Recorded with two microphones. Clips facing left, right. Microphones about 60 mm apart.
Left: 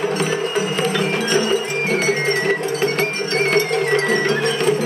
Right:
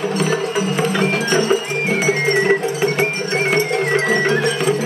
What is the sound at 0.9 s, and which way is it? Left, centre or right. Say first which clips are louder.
Cowbell: right 2 dB; right.